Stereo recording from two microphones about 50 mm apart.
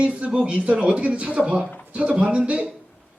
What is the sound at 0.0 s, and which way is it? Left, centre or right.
Speech, right.